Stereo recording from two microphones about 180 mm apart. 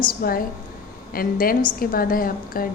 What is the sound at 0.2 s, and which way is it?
A woman's voice, 55° left (ahead or behind).